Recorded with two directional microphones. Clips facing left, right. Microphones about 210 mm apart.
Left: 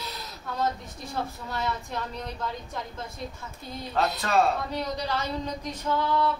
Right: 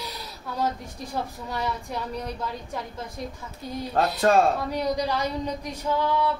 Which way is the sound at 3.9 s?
45° right (ahead or behind).